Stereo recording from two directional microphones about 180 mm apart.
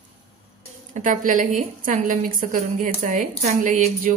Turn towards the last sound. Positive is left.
turn(degrees=-45)  # may be behind; listen again after turning